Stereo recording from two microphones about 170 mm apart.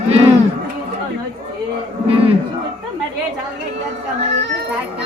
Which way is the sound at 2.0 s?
35° right (ahead or behind).